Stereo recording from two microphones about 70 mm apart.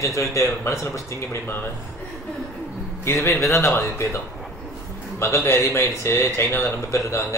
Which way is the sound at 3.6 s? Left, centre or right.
Left.